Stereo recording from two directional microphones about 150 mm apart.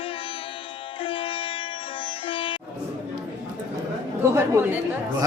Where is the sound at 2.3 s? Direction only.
35° left (ahead or behind).